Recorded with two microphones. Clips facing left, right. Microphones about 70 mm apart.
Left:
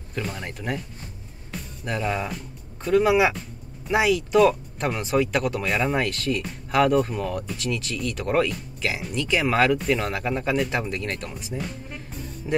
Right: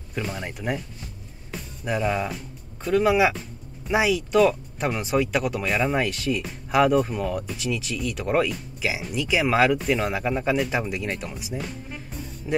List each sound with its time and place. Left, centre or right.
0.1 s speech: centre